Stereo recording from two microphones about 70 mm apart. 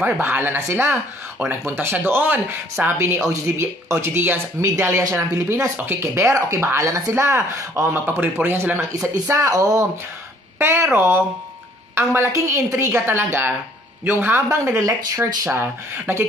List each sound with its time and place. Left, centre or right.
0.0 s speech: right
1.7 s speech: right
9.5 s speech: right
10.6 s speech: right
14.5 s speech: right
15.5 s speech: right